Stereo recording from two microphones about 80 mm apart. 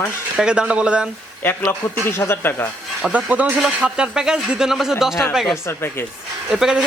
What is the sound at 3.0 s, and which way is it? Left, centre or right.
Speech, centre.